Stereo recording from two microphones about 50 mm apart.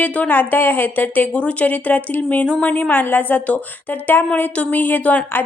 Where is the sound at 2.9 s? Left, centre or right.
Left.